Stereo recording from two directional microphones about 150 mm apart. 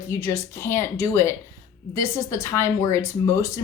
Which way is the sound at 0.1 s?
20° left (ahead or behind).